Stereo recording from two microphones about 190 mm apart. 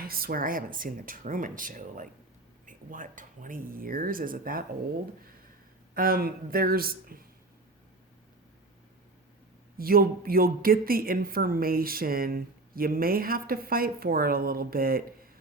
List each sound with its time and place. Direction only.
0.0 s speech: 50° right (ahead or behind)
5.9 s speech: 50° right (ahead or behind)
9.7 s speech: 50° right (ahead or behind)